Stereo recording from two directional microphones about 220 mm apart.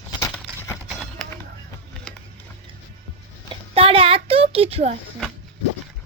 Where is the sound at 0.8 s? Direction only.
Centre (ahead or behind).